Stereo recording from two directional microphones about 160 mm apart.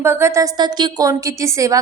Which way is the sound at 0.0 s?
15° right (ahead or behind).